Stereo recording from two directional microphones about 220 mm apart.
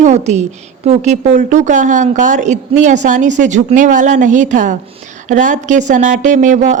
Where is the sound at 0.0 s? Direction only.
30° right (ahead or behind).